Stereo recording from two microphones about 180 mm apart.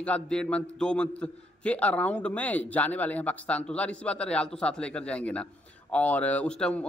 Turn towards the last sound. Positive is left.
turn(degrees=5)  # may be behind; listen again after turning